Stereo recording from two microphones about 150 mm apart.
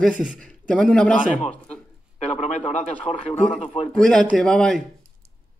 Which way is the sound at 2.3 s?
50° left (ahead or behind).